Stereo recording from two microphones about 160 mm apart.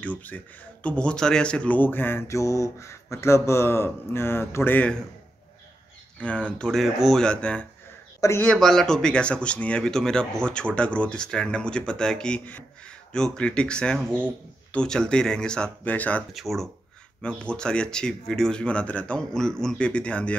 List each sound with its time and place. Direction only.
0.0 s speech: 10° left (ahead or behind)
6.1 s speech: 5° left (ahead or behind)
8.2 s a man's voice: 15° left (ahead or behind)
8.5 s speech: centre (ahead or behind)